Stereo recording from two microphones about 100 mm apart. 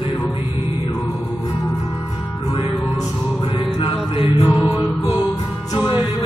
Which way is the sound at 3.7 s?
60° left (ahead or behind).